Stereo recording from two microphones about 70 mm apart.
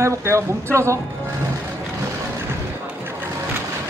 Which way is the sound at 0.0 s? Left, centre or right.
Right.